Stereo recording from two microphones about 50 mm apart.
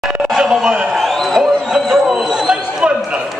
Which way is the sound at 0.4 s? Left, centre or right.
Centre.